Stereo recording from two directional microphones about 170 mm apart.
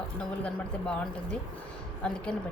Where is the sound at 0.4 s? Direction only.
5° left (ahead or behind).